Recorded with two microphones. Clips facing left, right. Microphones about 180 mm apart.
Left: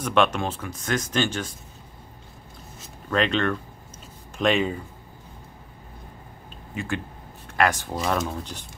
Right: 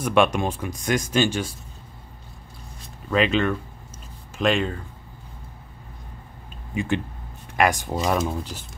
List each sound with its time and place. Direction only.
0.0 s speech: 10° right (ahead or behind)
2.8 s zipper: 5° right (ahead or behind)
4.4 s speech: centre (ahead or behind)
6.7 s speech: 15° right (ahead or behind)